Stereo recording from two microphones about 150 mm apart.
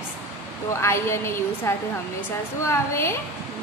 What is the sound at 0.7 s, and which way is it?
A woman's voice, 20° left (ahead or behind).